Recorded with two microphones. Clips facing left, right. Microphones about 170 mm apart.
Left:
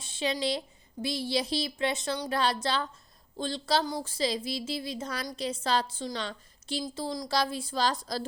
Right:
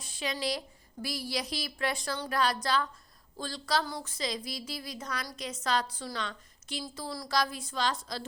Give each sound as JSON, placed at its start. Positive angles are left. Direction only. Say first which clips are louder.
{"t": 0.0, "sound": "a woman's voice", "louder": "left 4 dB", "side_deg": 25}